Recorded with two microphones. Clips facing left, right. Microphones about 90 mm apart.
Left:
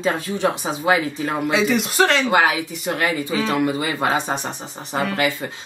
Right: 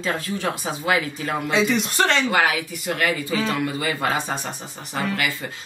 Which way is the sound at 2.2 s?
25° left (ahead or behind).